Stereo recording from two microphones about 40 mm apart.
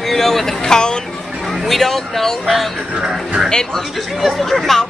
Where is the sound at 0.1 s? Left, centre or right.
Centre.